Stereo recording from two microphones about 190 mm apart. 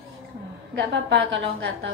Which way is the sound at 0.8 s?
70° right (ahead or behind).